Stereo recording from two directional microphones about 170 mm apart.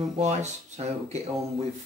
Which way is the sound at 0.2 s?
40° right (ahead or behind).